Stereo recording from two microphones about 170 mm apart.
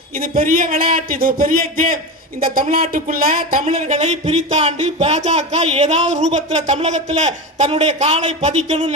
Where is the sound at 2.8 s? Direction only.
50° right (ahead or behind).